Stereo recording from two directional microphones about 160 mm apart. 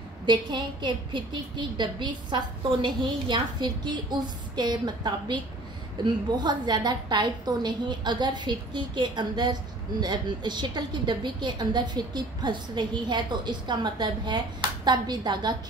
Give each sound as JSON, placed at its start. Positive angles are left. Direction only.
{"t": 0.3, "sound": "a woman's voice", "side_deg": -30}